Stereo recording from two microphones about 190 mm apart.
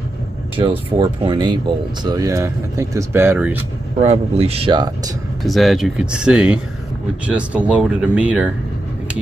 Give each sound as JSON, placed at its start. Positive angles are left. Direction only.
{"t": 0.6, "sound": "speech", "side_deg": -30}
{"t": 4.0, "sound": "speech", "side_deg": -35}
{"t": 5.4, "sound": "speech", "side_deg": 0}